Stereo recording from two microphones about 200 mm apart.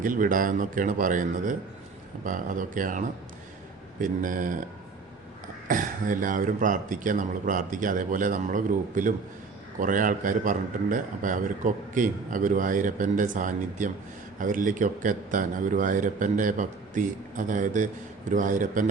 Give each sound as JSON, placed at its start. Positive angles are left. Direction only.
{"t": 0.0, "sound": "a man's voice", "side_deg": -40}
{"t": 4.0, "sound": "a man's voice", "side_deg": -40}
{"t": 5.6, "sound": "a man's voice", "side_deg": -40}